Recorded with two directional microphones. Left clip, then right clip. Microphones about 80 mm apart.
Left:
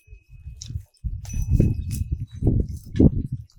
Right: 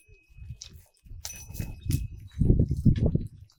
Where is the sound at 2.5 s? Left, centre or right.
Left.